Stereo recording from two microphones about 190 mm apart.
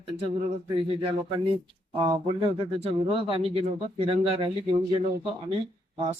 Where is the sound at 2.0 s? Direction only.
25° right (ahead or behind).